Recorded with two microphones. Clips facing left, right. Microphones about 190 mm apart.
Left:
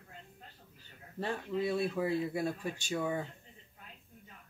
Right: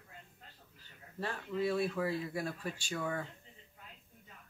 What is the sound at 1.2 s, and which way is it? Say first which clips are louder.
Speech: left 1 dB; 20° left (ahead or behind).